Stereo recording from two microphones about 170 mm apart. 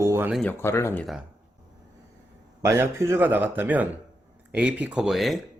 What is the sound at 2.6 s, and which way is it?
Speech, 15° right (ahead or behind).